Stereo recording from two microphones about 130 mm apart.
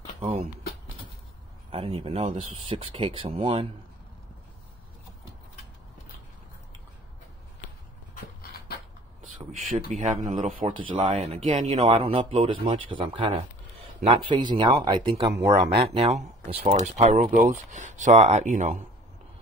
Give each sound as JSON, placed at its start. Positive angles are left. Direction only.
{"t": 1.7, "sound": "speech", "side_deg": -50}
{"t": 9.2, "sound": "a man's voice", "side_deg": -75}
{"t": 10.7, "sound": "speech", "side_deg": -40}
{"t": 11.5, "sound": "speech", "side_deg": -55}
{"t": 16.6, "sound": "speech", "side_deg": -65}
{"t": 17.3, "sound": "speech", "side_deg": -75}